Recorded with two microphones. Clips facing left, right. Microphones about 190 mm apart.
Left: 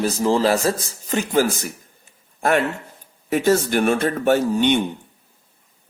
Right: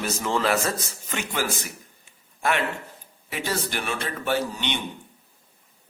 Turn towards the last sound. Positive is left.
turn(degrees=50)  # may be behind; listen again after turning